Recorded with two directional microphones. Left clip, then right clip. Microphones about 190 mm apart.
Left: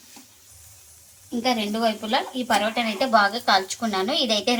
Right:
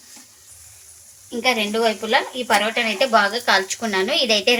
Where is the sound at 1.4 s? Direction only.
25° right (ahead or behind).